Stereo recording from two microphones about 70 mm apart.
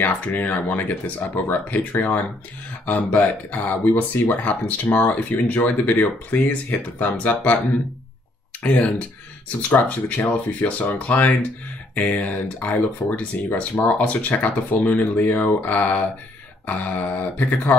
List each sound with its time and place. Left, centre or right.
0.0 s speech: left
8.6 s speech: left